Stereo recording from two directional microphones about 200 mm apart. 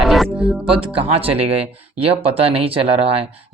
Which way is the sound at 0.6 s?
30° right (ahead or behind).